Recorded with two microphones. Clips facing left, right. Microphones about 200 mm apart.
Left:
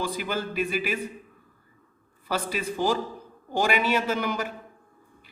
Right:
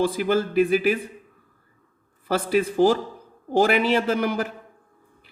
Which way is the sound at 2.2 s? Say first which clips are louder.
Right 7 dB; 50° right (ahead or behind).